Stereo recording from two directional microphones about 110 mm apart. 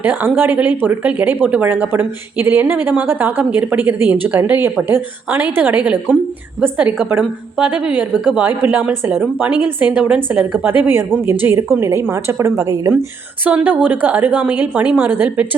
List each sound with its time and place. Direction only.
0.0 s a woman's voice: 15° right (ahead or behind)
12.9 s a woman's voice: 15° right (ahead or behind)